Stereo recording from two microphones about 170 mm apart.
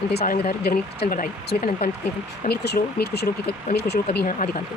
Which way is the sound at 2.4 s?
70° left (ahead or behind).